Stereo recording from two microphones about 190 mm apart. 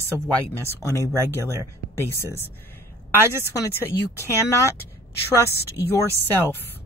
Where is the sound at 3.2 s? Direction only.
15° right (ahead or behind).